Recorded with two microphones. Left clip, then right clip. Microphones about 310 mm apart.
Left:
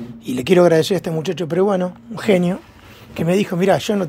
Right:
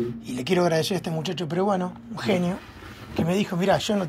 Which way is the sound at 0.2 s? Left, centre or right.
Left.